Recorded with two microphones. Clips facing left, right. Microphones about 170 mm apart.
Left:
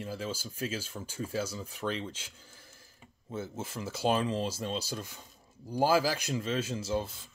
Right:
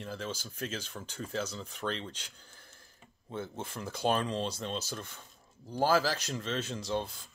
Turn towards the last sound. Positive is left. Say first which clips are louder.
# left 1 dB
turn(degrees=5)  # may be behind; listen again after turning